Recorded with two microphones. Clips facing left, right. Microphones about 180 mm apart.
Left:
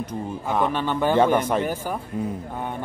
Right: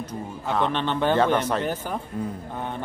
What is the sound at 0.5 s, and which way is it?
A man's voice, 10° left (ahead or behind).